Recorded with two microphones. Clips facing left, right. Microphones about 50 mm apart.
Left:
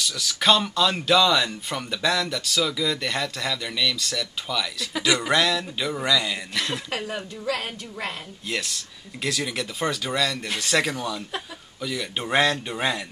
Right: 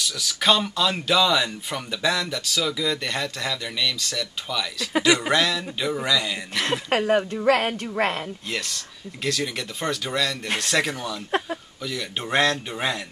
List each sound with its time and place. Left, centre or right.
0.0 s speech: centre
6.9 s a woman's voice: right
8.5 s speech: centre